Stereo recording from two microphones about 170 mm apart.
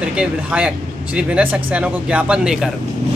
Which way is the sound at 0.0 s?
5° right (ahead or behind).